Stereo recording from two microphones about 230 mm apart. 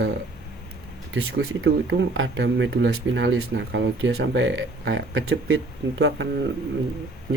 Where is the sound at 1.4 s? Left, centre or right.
Right.